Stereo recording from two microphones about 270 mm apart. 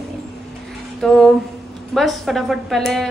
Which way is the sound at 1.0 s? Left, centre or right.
Centre.